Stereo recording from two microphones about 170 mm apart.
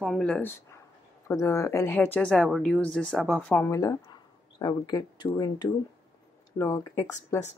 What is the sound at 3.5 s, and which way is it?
Speech, 15° left (ahead or behind).